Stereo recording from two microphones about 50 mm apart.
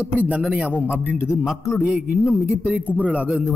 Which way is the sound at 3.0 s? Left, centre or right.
Right.